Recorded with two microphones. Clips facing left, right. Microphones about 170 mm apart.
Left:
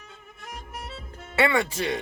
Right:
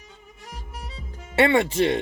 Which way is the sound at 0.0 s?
70° left (ahead or behind).